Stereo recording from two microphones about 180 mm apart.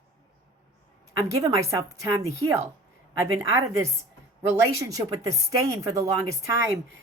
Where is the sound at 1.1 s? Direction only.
15° right (ahead or behind).